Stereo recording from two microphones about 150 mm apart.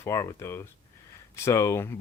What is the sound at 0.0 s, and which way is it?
Speech, 20° left (ahead or behind).